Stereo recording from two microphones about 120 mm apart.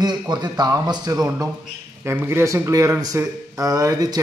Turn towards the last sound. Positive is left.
turn(degrees=-30)  # may be behind; listen again after turning